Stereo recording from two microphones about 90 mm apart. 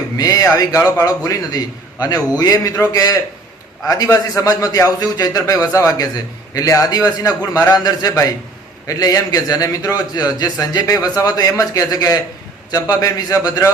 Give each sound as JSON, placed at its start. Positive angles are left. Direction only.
{"t": 0.2, "sound": "a man's voice", "side_deg": 40}